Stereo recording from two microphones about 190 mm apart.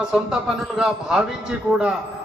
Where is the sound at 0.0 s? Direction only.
5° right (ahead or behind).